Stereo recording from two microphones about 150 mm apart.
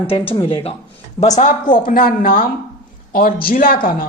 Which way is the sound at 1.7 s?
75° left (ahead or behind).